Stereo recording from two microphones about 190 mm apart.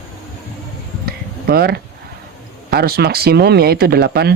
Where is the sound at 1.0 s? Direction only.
55° right (ahead or behind).